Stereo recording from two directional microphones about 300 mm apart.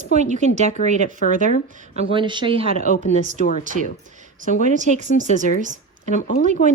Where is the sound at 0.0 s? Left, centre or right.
Right.